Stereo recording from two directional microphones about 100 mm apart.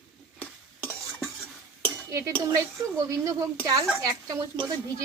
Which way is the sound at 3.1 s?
30° right (ahead or behind).